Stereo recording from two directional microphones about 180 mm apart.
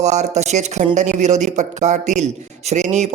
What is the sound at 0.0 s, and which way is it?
Speech, 40° right (ahead or behind).